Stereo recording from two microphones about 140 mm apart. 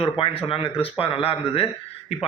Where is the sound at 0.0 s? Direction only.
45° left (ahead or behind).